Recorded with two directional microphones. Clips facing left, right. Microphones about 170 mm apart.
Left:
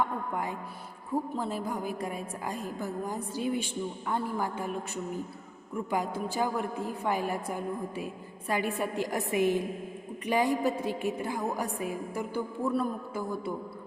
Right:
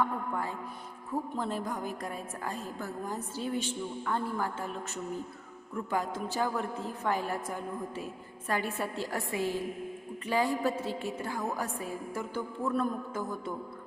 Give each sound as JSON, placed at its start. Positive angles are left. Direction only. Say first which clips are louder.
{"t": 0.0, "sound": "a woman's voice", "louder": "left 1 dB", "side_deg": 15}